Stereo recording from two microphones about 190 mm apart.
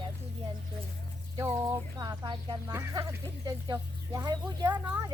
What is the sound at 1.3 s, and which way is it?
Speech, 15° right (ahead or behind).